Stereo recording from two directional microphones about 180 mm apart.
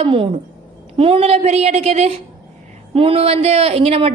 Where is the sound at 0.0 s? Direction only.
30° right (ahead or behind).